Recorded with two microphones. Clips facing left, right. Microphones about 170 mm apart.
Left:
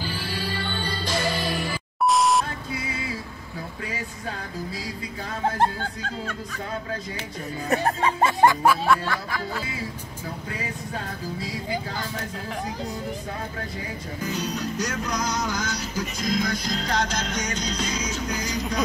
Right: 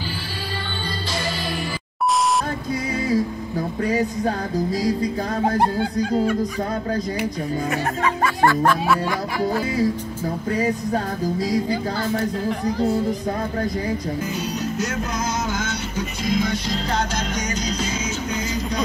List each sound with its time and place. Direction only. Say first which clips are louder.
5.6 s snicker: right 5 dB; 15° right (ahead or behind)
7.7 s speech: even; 30° left (ahead or behind)
8.4 s music: right 1 dB; 15° left (ahead or behind)
10.5 s music: right 13 dB; 40° right (ahead or behind)
15.5 s music: right 3 dB; 25° right (ahead or behind)